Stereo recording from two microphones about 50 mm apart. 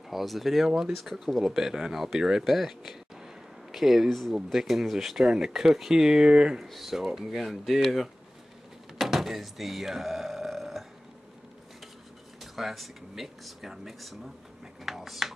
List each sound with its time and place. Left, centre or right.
0.1 s speech: centre
6.6 s speech: centre
8.9 s a sound: centre
12.4 s speech: centre